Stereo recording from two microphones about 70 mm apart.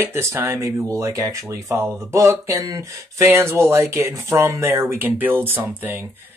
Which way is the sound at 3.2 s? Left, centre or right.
Right.